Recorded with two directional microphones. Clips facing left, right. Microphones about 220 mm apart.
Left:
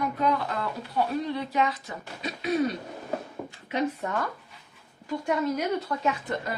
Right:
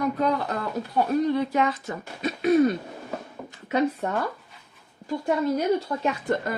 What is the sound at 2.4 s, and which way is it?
Throat clearing, 50° right (ahead or behind).